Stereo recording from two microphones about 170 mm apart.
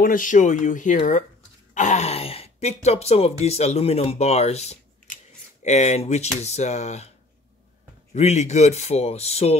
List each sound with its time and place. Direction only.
0.0 s speech: 50° left (ahead or behind)
8.1 s speech: 40° left (ahead or behind)